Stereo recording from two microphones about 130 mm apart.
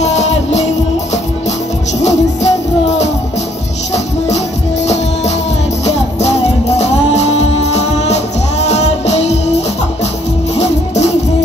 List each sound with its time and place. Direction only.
0.0 s music: 60° left (ahead or behind)
2.0 s music: 60° left (ahead or behind)
6.8 s music: 55° left (ahead or behind)
10.5 s music: 60° left (ahead or behind)